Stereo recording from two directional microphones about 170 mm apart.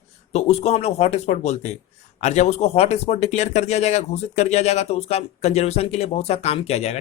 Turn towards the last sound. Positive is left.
turn(degrees=40)  # may be behind; listen again after turning